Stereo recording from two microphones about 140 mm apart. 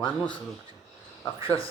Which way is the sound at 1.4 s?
40° left (ahead or behind).